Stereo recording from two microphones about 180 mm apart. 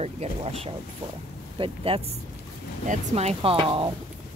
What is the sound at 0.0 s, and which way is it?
Speech, 35° right (ahead or behind).